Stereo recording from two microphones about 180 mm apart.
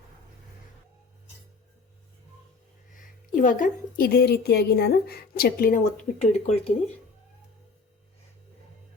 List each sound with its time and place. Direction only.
2.9 s a woman's voice: 45° left (ahead or behind)